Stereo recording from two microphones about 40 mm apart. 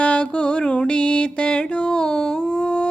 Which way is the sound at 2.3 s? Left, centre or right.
Left.